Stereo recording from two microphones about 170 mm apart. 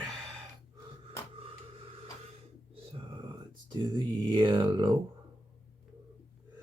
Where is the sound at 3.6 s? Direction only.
30° right (ahead or behind).